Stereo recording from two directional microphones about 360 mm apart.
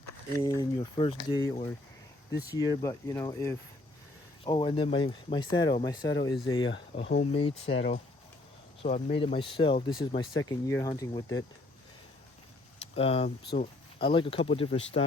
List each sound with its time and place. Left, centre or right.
0.4 s speech: centre
2.8 s speech: centre
8.8 s speech: centre
13.0 s speech: centre